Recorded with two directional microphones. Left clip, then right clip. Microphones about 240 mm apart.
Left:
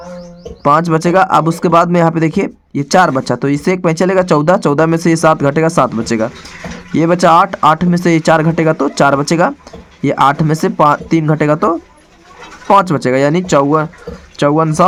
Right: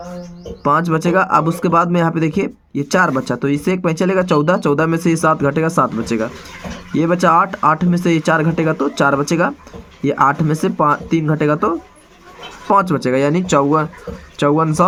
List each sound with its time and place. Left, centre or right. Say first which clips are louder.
0.6 s speech: left 5 dB; left